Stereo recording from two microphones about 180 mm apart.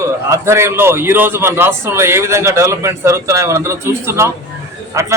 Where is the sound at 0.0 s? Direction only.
15° right (ahead or behind).